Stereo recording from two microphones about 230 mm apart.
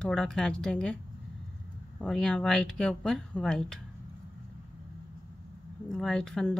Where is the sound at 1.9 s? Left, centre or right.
Centre.